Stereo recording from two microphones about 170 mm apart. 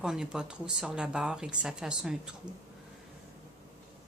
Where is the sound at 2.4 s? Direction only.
25° right (ahead or behind).